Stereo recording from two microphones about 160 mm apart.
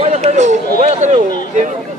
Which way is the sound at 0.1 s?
45° right (ahead or behind).